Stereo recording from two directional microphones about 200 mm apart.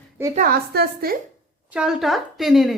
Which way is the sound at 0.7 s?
50° right (ahead or behind).